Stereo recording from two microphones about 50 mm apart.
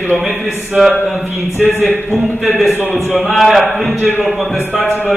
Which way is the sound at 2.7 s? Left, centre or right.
Left.